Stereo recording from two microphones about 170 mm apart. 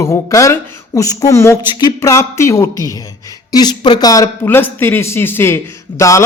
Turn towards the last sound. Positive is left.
turn(degrees=20)  # may be behind; listen again after turning